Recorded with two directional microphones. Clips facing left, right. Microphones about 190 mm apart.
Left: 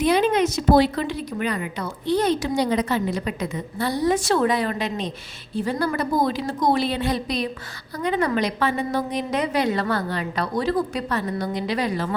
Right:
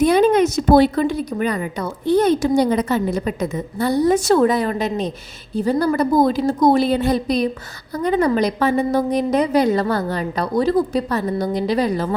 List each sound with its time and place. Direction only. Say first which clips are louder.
0.0 s a woman's voice: right 5 dB; 45° right (ahead or behind)